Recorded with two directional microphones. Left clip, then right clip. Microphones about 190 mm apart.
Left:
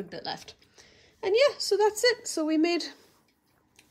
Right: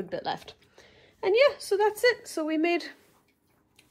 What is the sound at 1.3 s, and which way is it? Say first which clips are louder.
Speech: right 1 dB; 15° left (ahead or behind).